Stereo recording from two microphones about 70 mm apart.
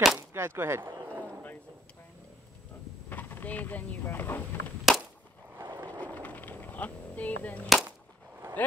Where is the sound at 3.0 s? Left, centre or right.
Left.